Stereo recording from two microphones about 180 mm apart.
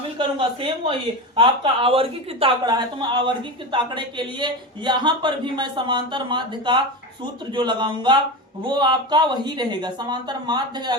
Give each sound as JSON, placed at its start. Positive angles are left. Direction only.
{"t": 0.2, "sound": "a woman's voice", "side_deg": -30}